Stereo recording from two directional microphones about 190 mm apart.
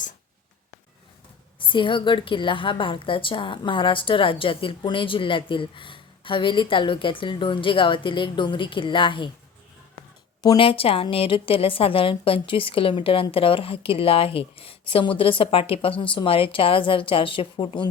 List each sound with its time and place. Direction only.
1.5 s a woman's voice: 25° left (ahead or behind)
10.4 s a woman's voice: 25° left (ahead or behind)